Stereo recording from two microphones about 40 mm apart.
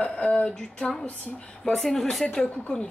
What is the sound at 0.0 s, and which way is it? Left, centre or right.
Speech, left.